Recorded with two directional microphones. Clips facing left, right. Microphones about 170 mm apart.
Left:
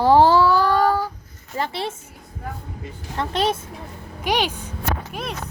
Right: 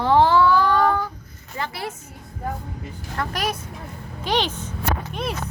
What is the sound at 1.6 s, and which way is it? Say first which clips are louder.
Speech: left 4 dB; 25° left (ahead or behind).